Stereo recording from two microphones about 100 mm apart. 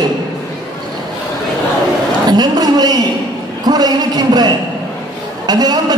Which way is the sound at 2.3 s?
40° right (ahead or behind).